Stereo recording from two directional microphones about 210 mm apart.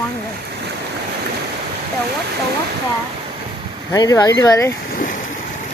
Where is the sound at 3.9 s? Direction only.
15° left (ahead or behind).